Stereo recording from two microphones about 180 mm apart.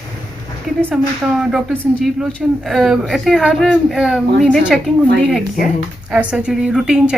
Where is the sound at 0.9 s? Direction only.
Centre (ahead or behind).